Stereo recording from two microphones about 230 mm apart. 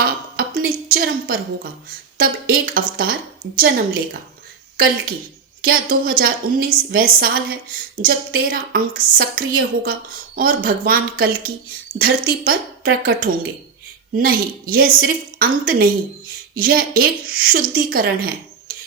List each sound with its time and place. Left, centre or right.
0.0 s a woman's voice: right
5.6 s speech: right